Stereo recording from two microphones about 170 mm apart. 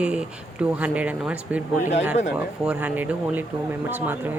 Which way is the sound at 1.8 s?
45° left (ahead or behind).